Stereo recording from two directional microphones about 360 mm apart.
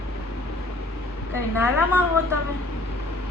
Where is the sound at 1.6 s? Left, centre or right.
Centre.